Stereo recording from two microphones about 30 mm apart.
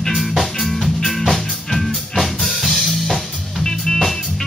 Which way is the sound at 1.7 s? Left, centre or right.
Centre.